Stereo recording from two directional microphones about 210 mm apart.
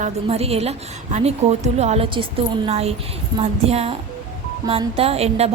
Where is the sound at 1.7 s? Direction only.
30° right (ahead or behind).